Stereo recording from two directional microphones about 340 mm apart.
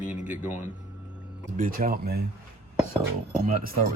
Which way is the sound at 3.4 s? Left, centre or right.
Right.